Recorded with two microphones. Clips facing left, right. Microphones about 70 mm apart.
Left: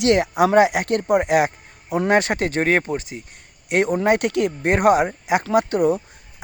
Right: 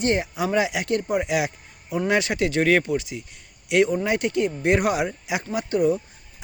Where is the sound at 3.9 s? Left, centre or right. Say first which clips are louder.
Left 4 dB; left.